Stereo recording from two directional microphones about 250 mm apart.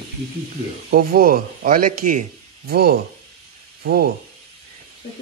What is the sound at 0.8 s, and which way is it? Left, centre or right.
Speech, right.